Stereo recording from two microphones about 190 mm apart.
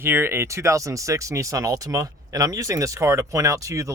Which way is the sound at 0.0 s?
10° right (ahead or behind).